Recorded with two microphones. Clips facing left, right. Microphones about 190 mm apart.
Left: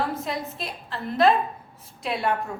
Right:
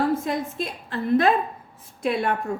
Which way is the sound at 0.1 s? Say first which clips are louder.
Right 5 dB; 50° right (ahead or behind).